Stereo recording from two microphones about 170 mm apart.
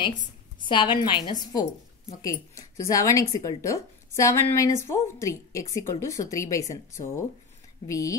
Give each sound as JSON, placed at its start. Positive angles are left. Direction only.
{"t": 0.6, "sound": "speech", "side_deg": 25}